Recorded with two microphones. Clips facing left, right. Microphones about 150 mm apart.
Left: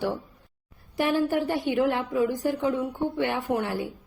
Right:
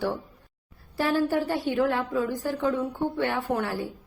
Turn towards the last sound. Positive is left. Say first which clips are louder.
# left 1 dB
turn(degrees=15)  # may be behind; listen again after turning